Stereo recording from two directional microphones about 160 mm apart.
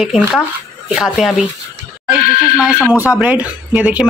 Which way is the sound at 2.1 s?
65° left (ahead or behind).